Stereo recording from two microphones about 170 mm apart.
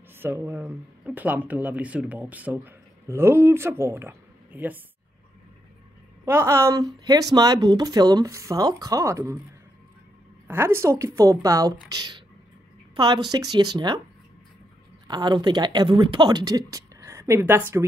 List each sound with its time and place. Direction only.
0.2 s speech: 15° right (ahead or behind)
6.2 s speech: 15° right (ahead or behind)
10.5 s a woman's voice: 15° right (ahead or behind)
15.0 s speech: 25° right (ahead or behind)